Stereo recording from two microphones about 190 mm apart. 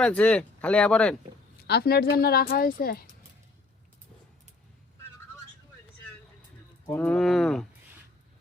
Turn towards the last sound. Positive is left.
turn(degrees=0)  # may be behind; listen again after turning